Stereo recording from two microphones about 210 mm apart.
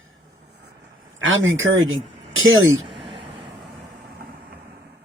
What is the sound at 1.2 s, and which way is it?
A man's voice, 70° right (ahead or behind).